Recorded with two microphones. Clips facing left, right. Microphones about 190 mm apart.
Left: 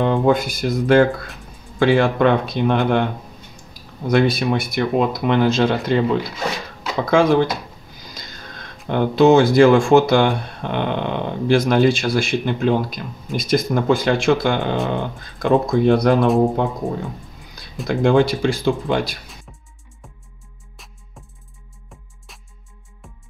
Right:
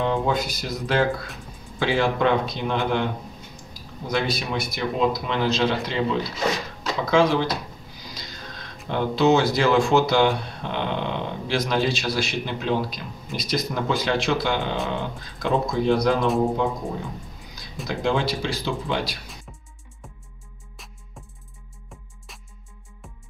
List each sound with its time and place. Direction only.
0.0 s speech: 55° left (ahead or behind)
4.1 s speech: 55° left (ahead or behind)
7.1 s speech: 50° left (ahead or behind)
8.1 s a sound: 50° left (ahead or behind)
8.8 s speech: 55° left (ahead or behind)
16.8 s speech: 15° left (ahead or behind)
17.8 s speech: 55° left (ahead or behind)
19.5 s music: centre (ahead or behind)
23.0 s music: centre (ahead or behind)